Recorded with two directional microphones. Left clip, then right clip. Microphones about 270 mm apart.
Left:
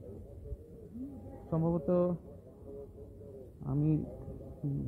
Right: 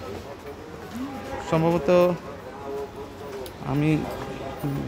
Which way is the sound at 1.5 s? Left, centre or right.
Centre.